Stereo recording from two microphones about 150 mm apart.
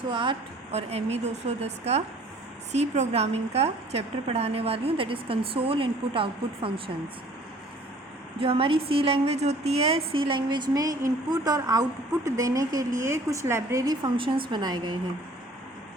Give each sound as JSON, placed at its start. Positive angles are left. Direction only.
{"t": 0.1, "sound": "a woman's voice", "side_deg": -35}
{"t": 8.4, "sound": "a woman's voice", "side_deg": -40}